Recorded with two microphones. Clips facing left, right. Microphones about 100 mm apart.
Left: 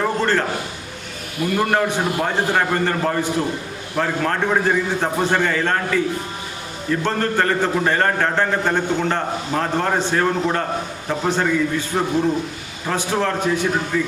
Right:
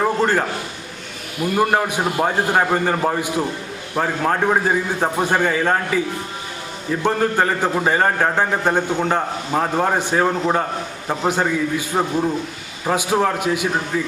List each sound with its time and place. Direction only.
0.0 s a sound: 15° right (ahead or behind)
1.5 s a man's voice: 15° right (ahead or behind)
7.0 s a man's voice: 10° right (ahead or behind)